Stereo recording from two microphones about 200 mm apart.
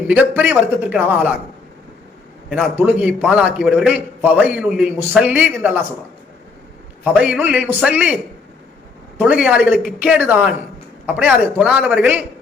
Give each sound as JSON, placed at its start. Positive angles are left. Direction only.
{"t": 0.1, "sound": "a man's voice", "side_deg": -10}
{"t": 2.5, "sound": "a man's voice", "side_deg": -5}
{"t": 7.0, "sound": "a man's voice", "side_deg": -5}
{"t": 9.1, "sound": "a man's voice", "side_deg": -5}